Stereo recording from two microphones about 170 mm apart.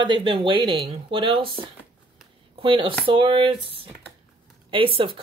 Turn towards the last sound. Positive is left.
turn(degrees=-30)  # may be behind; listen again after turning